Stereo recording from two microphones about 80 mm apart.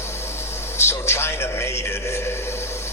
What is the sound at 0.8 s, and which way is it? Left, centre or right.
A man's voice, left.